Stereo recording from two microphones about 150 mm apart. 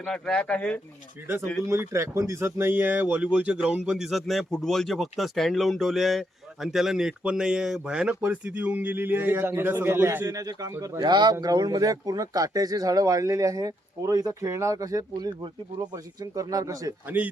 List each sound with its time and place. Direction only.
0.0 s speech: 5° left (ahead or behind)
1.6 s a man's voice: 15° right (ahead or behind)
17.1 s speech: 10° right (ahead or behind)